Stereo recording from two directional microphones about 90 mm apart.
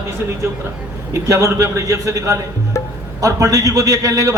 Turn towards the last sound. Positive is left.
turn(degrees=-40)  # may be behind; listen again after turning